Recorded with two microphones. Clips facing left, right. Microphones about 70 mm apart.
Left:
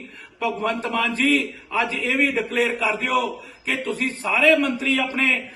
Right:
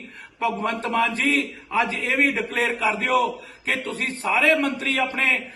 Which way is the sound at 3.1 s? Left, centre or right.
Right.